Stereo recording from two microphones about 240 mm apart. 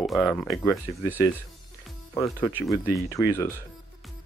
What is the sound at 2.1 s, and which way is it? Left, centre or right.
Speech, centre.